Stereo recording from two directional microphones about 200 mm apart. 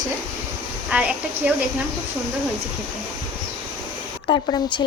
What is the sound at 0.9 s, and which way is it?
Speech, 5° right (ahead or behind).